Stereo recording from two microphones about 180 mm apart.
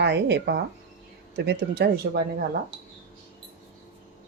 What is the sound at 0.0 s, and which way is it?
Speech, 70° right (ahead or behind).